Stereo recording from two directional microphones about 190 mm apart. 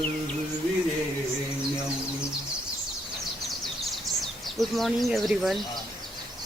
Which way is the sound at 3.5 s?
Centre (ahead or behind).